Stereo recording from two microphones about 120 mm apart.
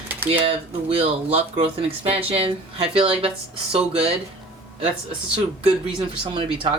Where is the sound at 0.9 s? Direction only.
50° right (ahead or behind).